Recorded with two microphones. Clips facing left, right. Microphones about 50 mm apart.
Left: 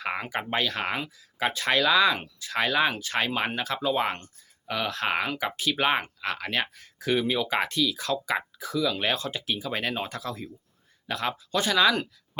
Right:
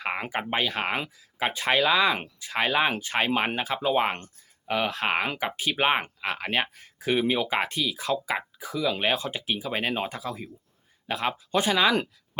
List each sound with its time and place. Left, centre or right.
0.0 s speech: centre
2.1 s speech: right